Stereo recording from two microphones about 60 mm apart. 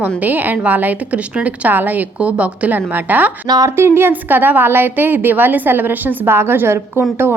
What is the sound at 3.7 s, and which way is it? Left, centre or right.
Speech, right.